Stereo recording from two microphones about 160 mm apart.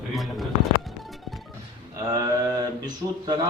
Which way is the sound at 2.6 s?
25° right (ahead or behind).